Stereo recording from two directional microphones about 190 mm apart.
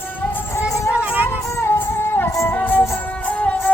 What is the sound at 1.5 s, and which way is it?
Music, 10° left (ahead or behind).